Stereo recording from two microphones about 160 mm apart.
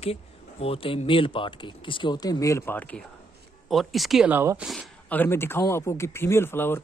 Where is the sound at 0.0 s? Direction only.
40° left (ahead or behind); by 3.0 s 10° left (ahead or behind).